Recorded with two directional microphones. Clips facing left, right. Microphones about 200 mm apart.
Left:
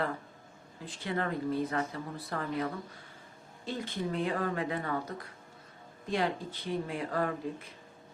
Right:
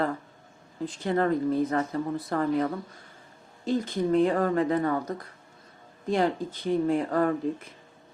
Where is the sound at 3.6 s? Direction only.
45° right (ahead or behind).